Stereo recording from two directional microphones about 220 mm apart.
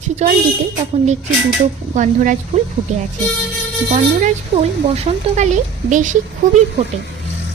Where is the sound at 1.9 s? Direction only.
35° right (ahead or behind).